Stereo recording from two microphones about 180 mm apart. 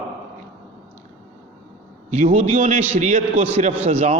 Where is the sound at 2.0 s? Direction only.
45° right (ahead or behind).